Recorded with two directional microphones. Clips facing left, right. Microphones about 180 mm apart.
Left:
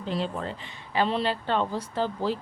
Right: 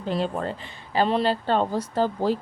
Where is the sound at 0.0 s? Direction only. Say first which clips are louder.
Right 4 dB; 50° right (ahead or behind).